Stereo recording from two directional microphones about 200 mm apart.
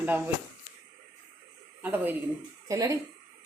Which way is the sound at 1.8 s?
10° right (ahead or behind).